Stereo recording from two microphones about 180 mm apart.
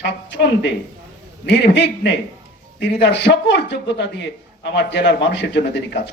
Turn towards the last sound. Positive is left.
turn(degrees=80)